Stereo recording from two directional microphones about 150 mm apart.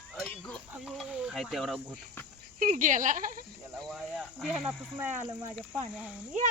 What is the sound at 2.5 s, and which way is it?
Speech, 60° right (ahead or behind).